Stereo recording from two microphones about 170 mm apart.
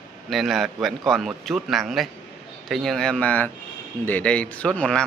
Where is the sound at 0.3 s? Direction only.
Centre (ahead or behind).